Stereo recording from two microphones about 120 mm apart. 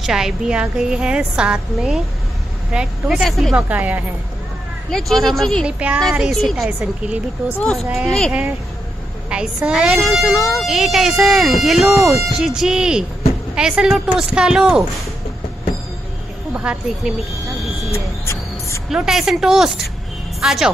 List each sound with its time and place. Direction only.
0.0 s a woman's voice: 5° right (ahead or behind)
3.5 s a woman's voice: 10° right (ahead or behind)
4.9 s a woman's voice: centre (ahead or behind)
5.7 s a woman's voice: 10° right (ahead or behind)
8.3 s a woman's voice: 10° right (ahead or behind)
16.5 s speech: 10° right (ahead or behind)
17.9 s music: 25° left (ahead or behind)
18.9 s a woman's voice: 5° right (ahead or behind)